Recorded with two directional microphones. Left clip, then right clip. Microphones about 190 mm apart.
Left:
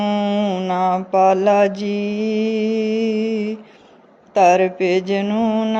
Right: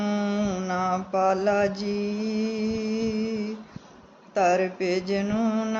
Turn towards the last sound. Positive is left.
turn(degrees=30)  # may be behind; listen again after turning